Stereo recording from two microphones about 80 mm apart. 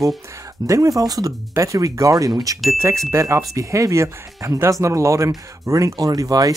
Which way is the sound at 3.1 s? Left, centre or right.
Right.